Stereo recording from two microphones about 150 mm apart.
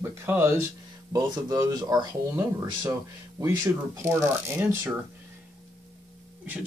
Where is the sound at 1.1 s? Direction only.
25° right (ahead or behind).